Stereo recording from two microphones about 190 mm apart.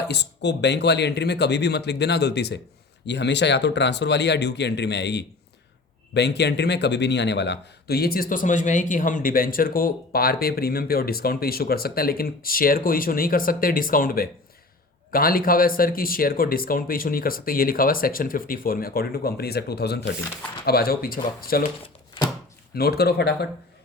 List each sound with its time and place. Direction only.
0.1 s a man's voice: 65° left (ahead or behind)
22.7 s speech: 55° left (ahead or behind)